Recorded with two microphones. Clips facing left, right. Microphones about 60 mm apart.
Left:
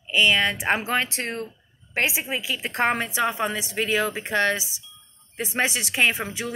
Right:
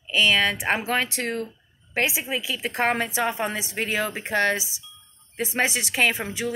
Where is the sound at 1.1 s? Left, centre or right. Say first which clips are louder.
Right 2 dB; left.